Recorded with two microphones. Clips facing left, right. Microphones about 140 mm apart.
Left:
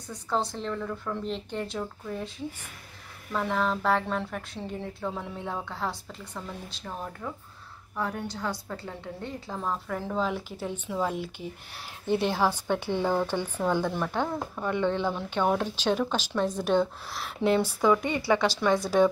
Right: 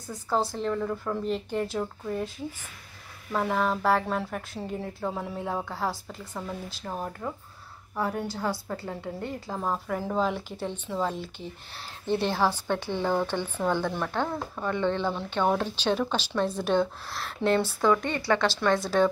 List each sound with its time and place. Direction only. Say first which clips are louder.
0.1 s a woman's voice: right 2 dB; centre (ahead or behind)
7.2 s a woman's voice: right 2 dB; 15° right (ahead or behind); by 19.0 s 15° left (ahead or behind)